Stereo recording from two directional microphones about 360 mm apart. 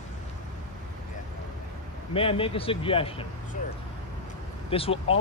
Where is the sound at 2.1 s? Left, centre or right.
Centre.